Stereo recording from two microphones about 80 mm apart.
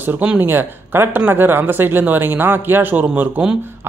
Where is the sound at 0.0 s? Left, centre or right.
Right.